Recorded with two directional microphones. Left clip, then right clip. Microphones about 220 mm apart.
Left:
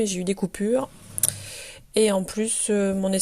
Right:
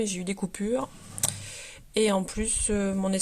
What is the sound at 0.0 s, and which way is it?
Speech, 15° left (ahead or behind).